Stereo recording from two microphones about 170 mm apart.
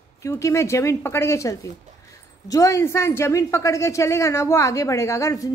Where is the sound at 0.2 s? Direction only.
15° left (ahead or behind).